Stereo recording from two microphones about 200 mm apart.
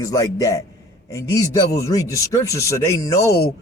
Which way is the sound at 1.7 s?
15° left (ahead or behind).